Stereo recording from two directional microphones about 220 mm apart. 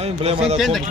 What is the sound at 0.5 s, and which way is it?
Speech, centre (ahead or behind).